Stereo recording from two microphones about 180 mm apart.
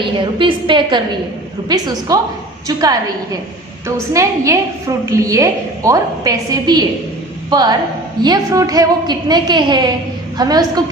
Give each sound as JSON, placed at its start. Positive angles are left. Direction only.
{"t": 0.0, "sound": "a woman's voice", "side_deg": -30}